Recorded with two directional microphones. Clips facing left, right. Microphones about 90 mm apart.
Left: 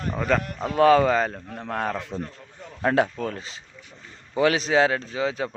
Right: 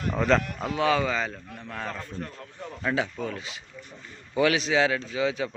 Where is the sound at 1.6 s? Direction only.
60° left (ahead or behind).